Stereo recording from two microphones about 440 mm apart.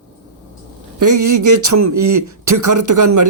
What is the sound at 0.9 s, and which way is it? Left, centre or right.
Speech, right.